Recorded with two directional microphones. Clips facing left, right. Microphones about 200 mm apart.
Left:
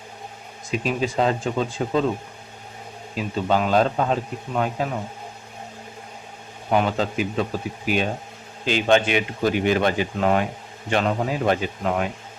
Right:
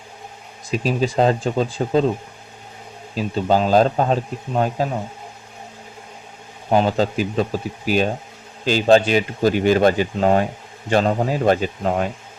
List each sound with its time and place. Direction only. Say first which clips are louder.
0.9 s speech: right 4 dB; 35° right (ahead or behind)
3.2 s speech: right 3 dB; 35° right (ahead or behind)
6.7 s speech: right 4 dB; 30° right (ahead or behind)